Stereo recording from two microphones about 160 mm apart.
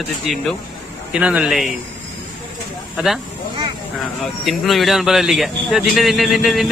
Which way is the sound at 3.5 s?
25° right (ahead or behind).